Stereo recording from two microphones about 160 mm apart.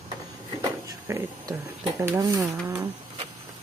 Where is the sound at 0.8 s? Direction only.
15° right (ahead or behind).